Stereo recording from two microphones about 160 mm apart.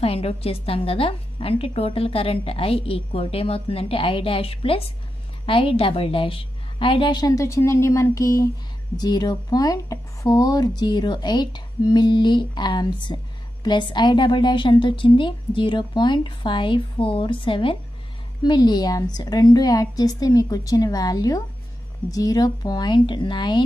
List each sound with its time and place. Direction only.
0.0 s a woman's voice: 40° left (ahead or behind)